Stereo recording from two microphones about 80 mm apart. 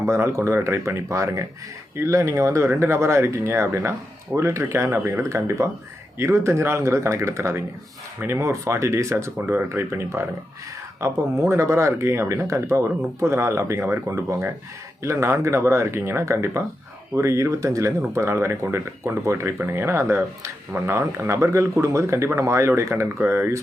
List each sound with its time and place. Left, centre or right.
0.0 s speech: right